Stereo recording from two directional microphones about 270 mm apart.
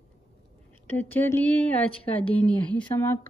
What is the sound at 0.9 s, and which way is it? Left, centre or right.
Speech, centre.